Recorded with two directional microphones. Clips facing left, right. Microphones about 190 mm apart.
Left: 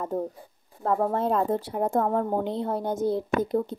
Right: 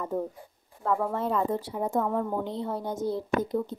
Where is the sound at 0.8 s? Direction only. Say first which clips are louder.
Left 3 dB; 40° left (ahead or behind).